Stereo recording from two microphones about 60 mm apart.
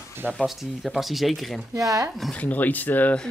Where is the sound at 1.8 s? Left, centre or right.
Right.